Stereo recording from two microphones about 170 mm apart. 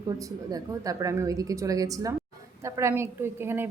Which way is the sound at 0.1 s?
20° right (ahead or behind).